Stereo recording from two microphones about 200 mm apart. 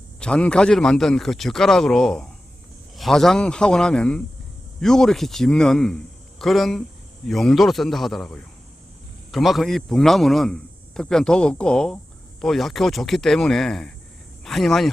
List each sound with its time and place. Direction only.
0.2 s a man's voice: 5° left (ahead or behind)